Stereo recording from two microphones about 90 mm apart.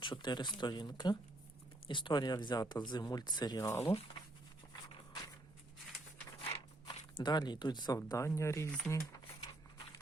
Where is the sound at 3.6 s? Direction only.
30° left (ahead or behind).